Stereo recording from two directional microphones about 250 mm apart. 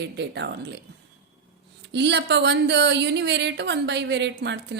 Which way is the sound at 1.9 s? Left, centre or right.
Right.